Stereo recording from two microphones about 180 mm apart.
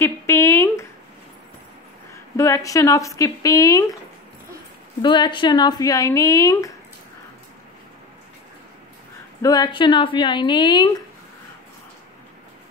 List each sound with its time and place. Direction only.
0.0 s a sound: 15° left (ahead or behind)
2.3 s a woman's voice: 15° left (ahead or behind)
5.0 s speech: 25° left (ahead or behind)
9.4 s speech: 20° left (ahead or behind)